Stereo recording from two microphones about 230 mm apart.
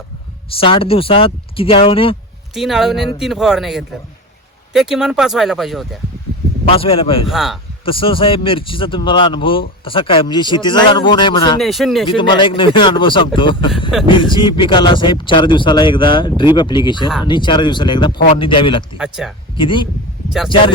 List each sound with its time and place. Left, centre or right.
0.5 s a man's voice: left
2.6 s speech: centre
6.7 s a man's voice: left
7.3 s speech: centre
7.9 s a man's voice: left
11.6 s speech: centre
12.0 s a man's voice: left
18.9 s speech: centre
19.5 s a man's voice: left